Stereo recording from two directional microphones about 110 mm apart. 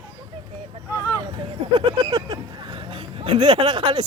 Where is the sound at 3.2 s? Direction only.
55° right (ahead or behind).